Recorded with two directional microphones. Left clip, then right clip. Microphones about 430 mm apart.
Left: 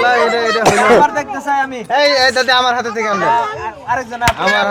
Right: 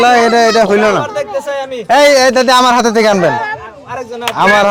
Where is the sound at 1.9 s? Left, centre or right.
Right.